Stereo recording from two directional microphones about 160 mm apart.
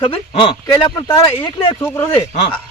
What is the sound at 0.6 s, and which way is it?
Speech, 25° left (ahead or behind).